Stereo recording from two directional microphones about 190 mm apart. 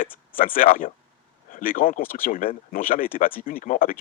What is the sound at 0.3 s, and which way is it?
A man's voice, 45° left (ahead or behind).